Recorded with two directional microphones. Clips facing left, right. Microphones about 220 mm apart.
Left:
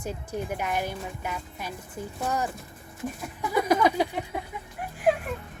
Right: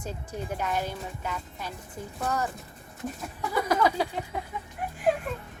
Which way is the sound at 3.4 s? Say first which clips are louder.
Left 2 dB; 15° left (ahead or behind).